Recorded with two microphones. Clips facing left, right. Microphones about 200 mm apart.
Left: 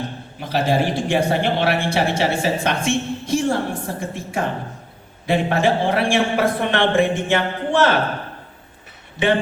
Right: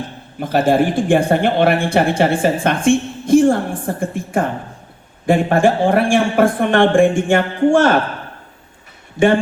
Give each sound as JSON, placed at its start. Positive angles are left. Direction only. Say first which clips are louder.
{"t": 0.3, "sound": "speech", "louder": "right 6 dB", "side_deg": -50}
{"t": 9.1, "sound": "speech", "louder": "right 5 dB", "side_deg": -45}